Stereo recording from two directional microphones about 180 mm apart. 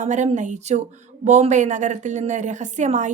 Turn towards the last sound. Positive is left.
turn(degrees=-40)  # may be behind; listen again after turning